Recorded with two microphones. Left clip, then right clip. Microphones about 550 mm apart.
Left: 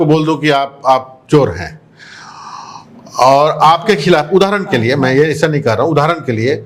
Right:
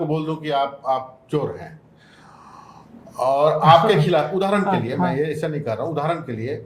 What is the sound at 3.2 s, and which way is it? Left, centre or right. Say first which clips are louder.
A man's voice: left 9 dB; left.